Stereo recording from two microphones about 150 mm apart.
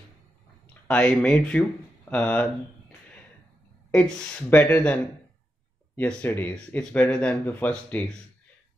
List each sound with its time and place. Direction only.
0.7 s speech: 5° left (ahead or behind)
3.9 s speech: 5° left (ahead or behind)